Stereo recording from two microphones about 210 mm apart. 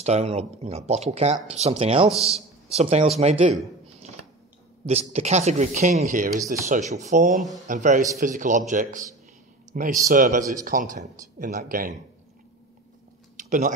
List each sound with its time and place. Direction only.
0.0 s speech: 30° right (ahead or behind)
5.1 s speech: 30° right (ahead or behind)
13.4 s a sound: 40° right (ahead or behind)